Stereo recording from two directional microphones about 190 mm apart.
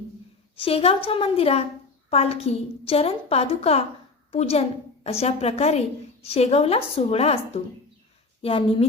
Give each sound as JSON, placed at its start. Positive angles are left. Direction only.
{"t": 0.5, "sound": "a woman's voice", "side_deg": 30}